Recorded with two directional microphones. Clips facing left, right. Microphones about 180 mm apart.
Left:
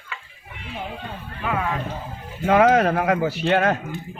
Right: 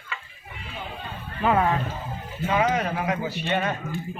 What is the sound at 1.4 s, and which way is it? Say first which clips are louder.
Speech: right 5 dB; 35° right (ahead or behind).